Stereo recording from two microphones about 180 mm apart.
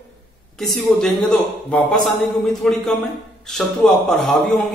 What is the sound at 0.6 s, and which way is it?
A man's voice, centre (ahead or behind).